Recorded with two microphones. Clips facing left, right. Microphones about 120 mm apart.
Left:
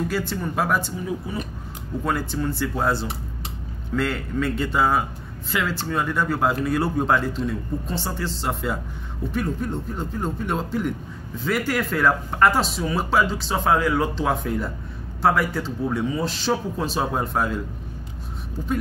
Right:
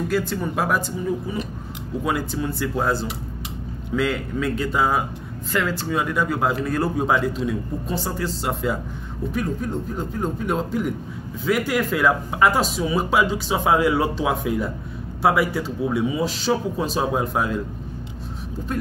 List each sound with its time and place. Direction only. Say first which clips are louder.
0.1 s speech: right 3 dB; centre (ahead or behind)
2.0 s speech: even; 5° right (ahead or behind)
14.1 s speech: right 1 dB; 5° right (ahead or behind)